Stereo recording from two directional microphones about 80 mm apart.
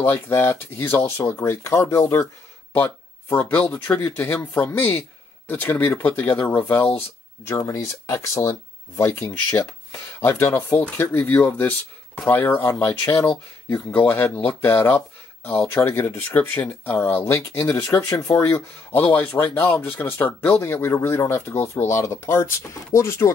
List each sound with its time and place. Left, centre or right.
0.0 s speech: left
3.3 s speech: left
7.5 s speech: left